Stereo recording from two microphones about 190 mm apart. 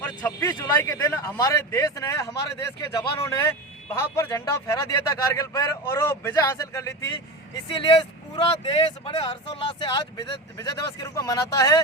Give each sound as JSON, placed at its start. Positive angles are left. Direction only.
{"t": 0.0, "sound": "speech", "side_deg": 10}
{"t": 8.4, "sound": "speech", "side_deg": 30}